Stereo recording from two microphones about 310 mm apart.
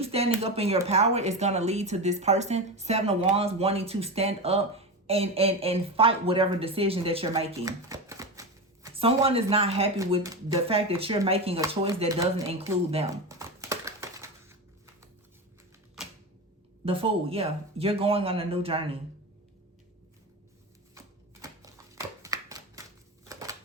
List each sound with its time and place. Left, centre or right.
0.0 s speech: centre
16.8 s speech: centre
21.4 s typewriter: centre
23.2 s shuffling cards: centre